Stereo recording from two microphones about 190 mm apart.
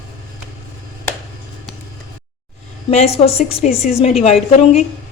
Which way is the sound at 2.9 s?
35° left (ahead or behind).